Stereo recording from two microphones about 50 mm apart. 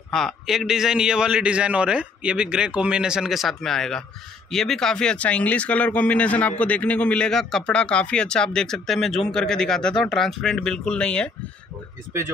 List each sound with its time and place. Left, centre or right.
0.1 s a man's voice: centre
0.5 s a man's voice: centre
3.3 s speech: centre
3.6 s speech: centre; by 7.2 s left
7.2 s speech: centre
7.6 s speech: left
10.9 s speech: centre